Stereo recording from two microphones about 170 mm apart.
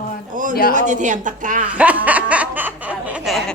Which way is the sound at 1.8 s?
10° right (ahead or behind).